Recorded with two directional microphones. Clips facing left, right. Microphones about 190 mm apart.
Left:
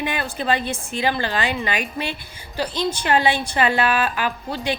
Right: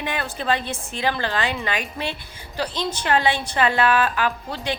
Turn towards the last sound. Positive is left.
turn(degrees=5)  # may be behind; listen again after turning